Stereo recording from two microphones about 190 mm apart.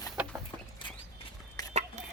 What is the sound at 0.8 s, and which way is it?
Horse, 25° left (ahead or behind).